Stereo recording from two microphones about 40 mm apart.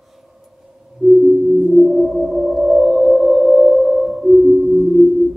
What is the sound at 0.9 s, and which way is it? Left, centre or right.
Music, centre.